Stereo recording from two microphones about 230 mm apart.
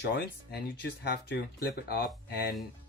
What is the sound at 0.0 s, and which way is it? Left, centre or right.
Speech, left.